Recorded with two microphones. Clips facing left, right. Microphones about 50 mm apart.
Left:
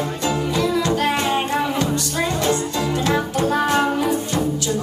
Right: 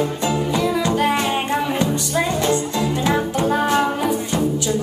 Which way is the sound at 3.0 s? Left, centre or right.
Centre.